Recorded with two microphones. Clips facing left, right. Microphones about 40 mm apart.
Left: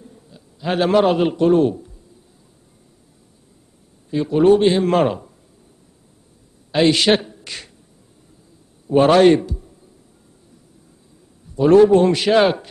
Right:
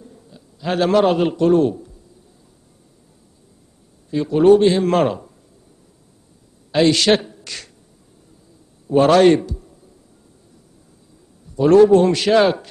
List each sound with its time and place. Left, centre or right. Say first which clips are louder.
0.0 s a sound: right 1 dB; centre
1.0 s a man's voice: even; centre
4.1 s a man's voice: right 1 dB; centre
6.7 s speech: even; centre
7.1 s speech: even; centre
7.4 s beatboxing: even; centre
8.9 s a man's voice: even; centre
11.6 s a man's voice: even; centre